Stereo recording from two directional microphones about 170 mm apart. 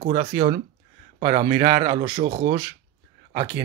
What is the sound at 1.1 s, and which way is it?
Speech, 45° right (ahead or behind).